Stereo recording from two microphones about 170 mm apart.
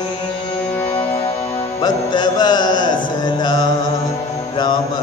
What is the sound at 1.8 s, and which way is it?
Music, 25° left (ahead or behind).